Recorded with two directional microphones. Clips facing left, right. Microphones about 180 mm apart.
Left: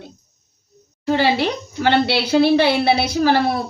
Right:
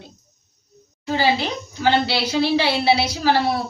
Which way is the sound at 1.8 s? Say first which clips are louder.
Left 2 dB; 60° left (ahead or behind).